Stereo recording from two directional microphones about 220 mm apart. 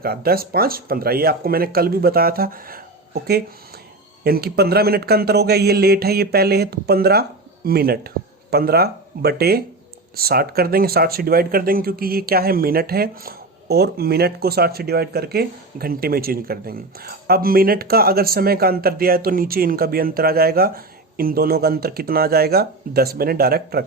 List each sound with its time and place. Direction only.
0.0 s speech: 45° right (ahead or behind)